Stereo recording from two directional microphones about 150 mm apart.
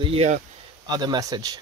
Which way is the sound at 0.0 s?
45° right (ahead or behind).